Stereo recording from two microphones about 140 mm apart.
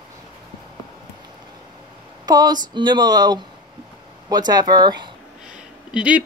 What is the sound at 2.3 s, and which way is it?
Speech, 30° right (ahead or behind).